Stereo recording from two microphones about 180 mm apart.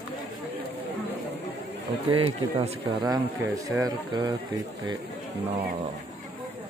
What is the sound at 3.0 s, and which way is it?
Speech, 20° right (ahead or behind).